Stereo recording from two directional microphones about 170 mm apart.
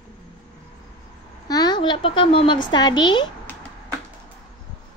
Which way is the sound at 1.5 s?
25° left (ahead or behind).